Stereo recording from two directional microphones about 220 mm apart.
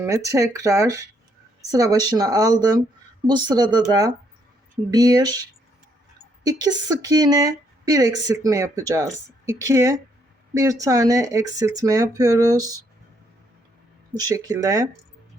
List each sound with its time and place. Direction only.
0.0 s a woman's voice: 15° right (ahead or behind)
6.4 s a woman's voice: 15° right (ahead or behind)
14.2 s a woman's voice: 15° right (ahead or behind)